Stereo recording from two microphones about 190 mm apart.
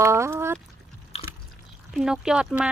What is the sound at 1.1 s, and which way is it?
Drip, 30° left (ahead or behind).